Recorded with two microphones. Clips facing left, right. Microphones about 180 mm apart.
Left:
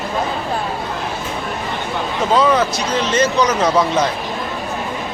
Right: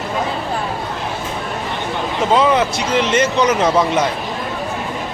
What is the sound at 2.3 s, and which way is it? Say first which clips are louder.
Speech: even; 20° right (ahead or behind).